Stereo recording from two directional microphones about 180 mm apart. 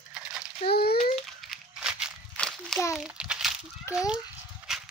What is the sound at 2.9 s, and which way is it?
A child's voice, 5° right (ahead or behind).